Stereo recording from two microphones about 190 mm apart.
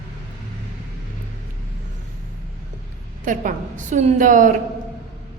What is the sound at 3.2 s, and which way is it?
A woman's voice, 45° right (ahead or behind).